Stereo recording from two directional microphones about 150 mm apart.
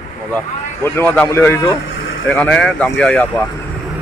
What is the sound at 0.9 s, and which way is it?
Speech, 10° left (ahead or behind).